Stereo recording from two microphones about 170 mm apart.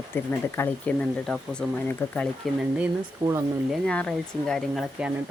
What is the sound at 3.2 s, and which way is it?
Speech, 20° right (ahead or behind).